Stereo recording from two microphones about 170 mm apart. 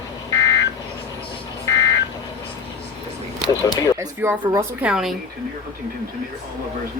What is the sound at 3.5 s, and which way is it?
Speech, 20° left (ahead or behind).